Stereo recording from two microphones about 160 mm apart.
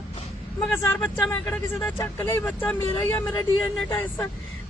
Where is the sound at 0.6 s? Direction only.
10° left (ahead or behind).